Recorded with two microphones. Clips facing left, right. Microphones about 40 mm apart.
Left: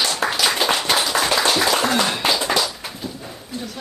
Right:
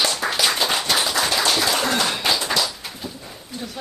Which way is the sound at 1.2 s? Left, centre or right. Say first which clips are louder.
Left 2 dB; centre.